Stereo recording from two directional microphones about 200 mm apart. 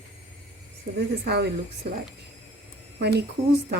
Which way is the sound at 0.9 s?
55° right (ahead or behind).